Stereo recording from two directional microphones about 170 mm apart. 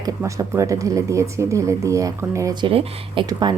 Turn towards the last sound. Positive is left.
turn(degrees=-25)  # may be behind; listen again after turning